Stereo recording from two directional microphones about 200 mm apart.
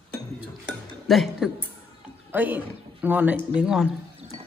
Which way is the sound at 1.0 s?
Centre (ahead or behind).